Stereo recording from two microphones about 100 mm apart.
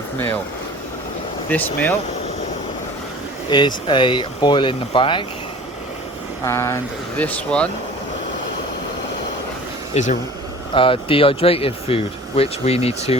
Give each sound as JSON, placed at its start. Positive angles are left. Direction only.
{"t": 1.5, "sound": "speech", "side_deg": 15}
{"t": 3.5, "sound": "speech", "side_deg": 50}
{"t": 6.4, "sound": "speech", "side_deg": 25}
{"t": 7.2, "sound": "speech", "side_deg": 15}
{"t": 10.0, "sound": "speech", "side_deg": 90}
{"t": 10.8, "sound": "speech", "side_deg": 65}